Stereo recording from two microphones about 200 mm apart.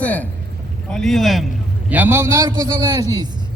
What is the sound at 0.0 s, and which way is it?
A man's voice, 5° left (ahead or behind).